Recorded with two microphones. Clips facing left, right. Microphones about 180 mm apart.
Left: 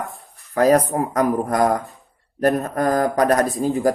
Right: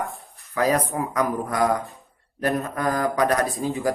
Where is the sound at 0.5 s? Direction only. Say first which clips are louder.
Left 6 dB; 45° left (ahead or behind).